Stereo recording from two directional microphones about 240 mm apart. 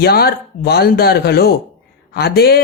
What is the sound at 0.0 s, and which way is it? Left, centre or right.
Speech, left.